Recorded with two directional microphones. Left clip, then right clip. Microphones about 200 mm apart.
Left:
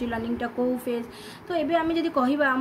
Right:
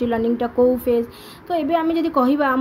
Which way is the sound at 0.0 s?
55° right (ahead or behind).